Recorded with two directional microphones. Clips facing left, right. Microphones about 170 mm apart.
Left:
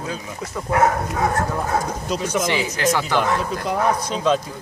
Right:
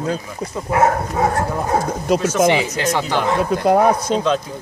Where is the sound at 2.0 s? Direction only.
60° right (ahead or behind).